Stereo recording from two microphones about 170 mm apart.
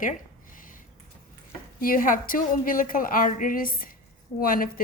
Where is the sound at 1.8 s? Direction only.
55° left (ahead or behind).